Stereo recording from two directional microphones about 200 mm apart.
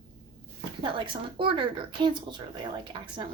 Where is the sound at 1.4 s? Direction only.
25° right (ahead or behind).